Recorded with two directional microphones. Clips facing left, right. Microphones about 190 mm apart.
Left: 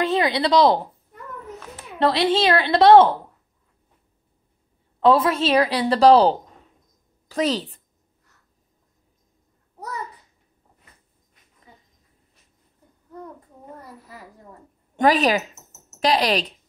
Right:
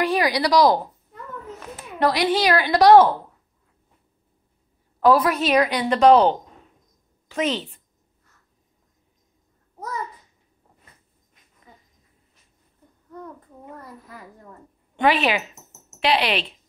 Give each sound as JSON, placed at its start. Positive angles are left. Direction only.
{"t": 0.0, "sound": "speech", "side_deg": 25}
{"t": 2.0, "sound": "a woman's voice", "side_deg": 25}
{"t": 5.0, "sound": "a woman's voice", "side_deg": 25}
{"t": 15.0, "sound": "a woman's voice", "side_deg": 40}